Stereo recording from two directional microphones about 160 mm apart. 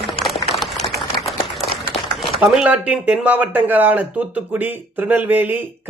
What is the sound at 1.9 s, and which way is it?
Speech, centre (ahead or behind).